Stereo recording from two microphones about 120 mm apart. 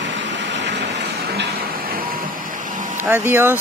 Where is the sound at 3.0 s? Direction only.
20° right (ahead or behind).